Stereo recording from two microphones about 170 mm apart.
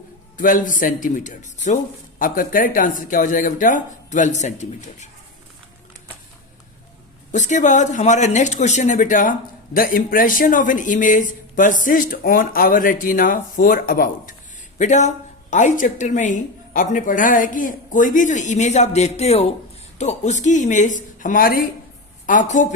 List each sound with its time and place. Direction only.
0.3 s speech: 50° left (ahead or behind)
7.3 s speech: 45° left (ahead or behind)
14.8 s speech: 45° left (ahead or behind)